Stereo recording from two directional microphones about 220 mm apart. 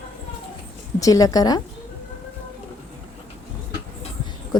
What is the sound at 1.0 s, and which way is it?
Speech, 15° left (ahead or behind).